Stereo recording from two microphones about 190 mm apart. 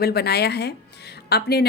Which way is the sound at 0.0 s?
55° left (ahead or behind).